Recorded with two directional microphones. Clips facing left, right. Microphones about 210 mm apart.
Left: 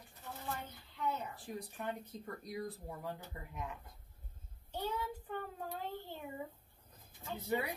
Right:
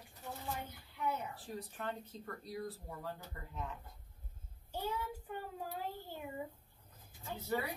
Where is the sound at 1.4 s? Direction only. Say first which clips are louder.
Left 2 dB; 15° left (ahead or behind).